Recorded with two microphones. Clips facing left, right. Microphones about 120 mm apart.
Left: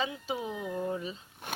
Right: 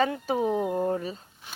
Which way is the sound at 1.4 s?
55° left (ahead or behind).